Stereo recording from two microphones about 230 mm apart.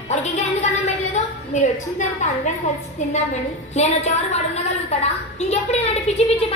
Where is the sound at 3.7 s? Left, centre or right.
Left.